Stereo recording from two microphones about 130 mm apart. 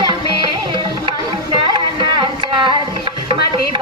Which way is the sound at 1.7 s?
40° right (ahead or behind).